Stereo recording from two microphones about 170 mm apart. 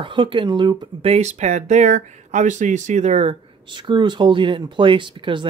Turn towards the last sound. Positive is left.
turn(degrees=-30)  # may be behind; listen again after turning